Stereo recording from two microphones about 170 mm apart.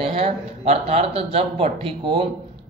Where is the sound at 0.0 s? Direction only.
35° right (ahead or behind).